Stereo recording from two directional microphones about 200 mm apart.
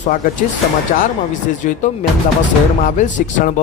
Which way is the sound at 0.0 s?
40° left (ahead or behind).